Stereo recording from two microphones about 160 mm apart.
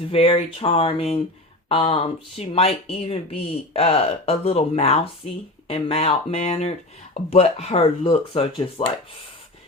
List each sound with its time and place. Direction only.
0.1 s speech: 35° left (ahead or behind)